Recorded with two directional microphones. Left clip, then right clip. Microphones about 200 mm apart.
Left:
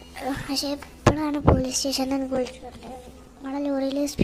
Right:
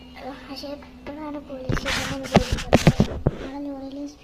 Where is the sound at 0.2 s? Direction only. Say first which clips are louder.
Left 7 dB; 35° left (ahead or behind).